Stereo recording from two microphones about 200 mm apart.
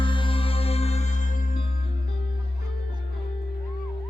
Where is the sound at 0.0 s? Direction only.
25° left (ahead or behind); by 1.6 s 45° left (ahead or behind).